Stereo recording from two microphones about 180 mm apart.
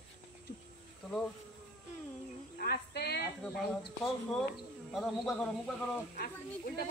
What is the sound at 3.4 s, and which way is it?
Speech, centre (ahead or behind).